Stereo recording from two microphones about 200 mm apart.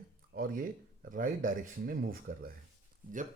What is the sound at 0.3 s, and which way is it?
Speech, 45° right (ahead or behind).